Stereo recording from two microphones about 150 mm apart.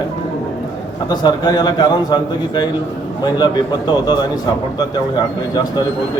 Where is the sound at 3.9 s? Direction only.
30° left (ahead or behind).